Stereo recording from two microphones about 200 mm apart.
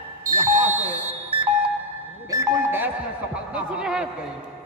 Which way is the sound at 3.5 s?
5° right (ahead or behind).